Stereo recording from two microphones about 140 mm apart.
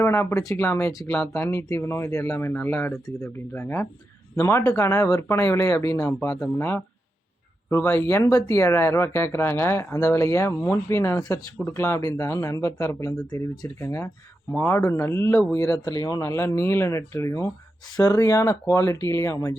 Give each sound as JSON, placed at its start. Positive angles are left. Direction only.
{"t": 0.0, "sound": "speech", "side_deg": 15}